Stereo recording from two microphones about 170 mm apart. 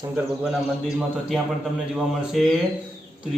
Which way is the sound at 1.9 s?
Centre (ahead or behind).